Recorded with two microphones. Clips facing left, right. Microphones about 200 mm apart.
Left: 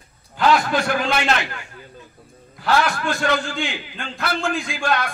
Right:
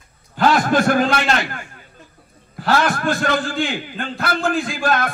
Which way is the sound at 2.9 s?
50° right (ahead or behind).